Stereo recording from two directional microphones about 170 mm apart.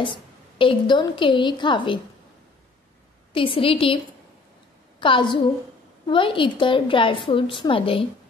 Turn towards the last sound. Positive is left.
turn(degrees=30)  # may be behind; listen again after turning